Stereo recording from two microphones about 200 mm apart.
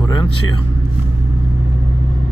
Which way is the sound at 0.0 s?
20° left (ahead or behind).